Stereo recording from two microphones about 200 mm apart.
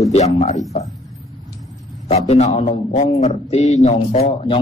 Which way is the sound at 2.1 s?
35° left (ahead or behind).